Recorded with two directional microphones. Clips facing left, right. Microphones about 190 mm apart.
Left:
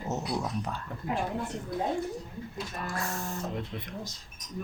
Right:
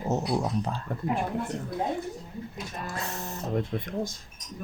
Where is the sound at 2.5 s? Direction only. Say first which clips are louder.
Left 2 dB; 20° right (ahead or behind).